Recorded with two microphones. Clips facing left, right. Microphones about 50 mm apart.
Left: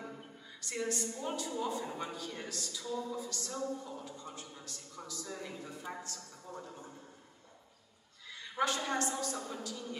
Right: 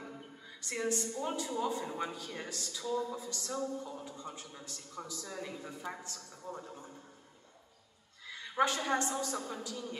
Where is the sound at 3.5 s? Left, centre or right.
Centre.